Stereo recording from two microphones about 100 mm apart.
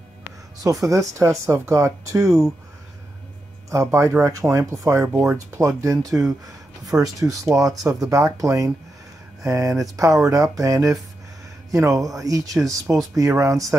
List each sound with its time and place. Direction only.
0.8 s speech: 30° right (ahead or behind)
3.7 s speech: 30° right (ahead or behind)